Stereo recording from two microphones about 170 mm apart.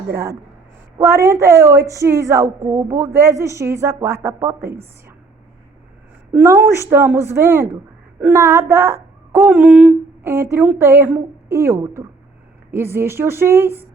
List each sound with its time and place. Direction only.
0.9 s a woman's voice: 15° right (ahead or behind)
6.3 s a woman's voice: 15° right (ahead or behind)